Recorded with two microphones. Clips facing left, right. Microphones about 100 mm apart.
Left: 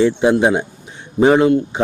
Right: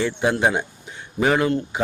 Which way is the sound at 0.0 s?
20° left (ahead or behind).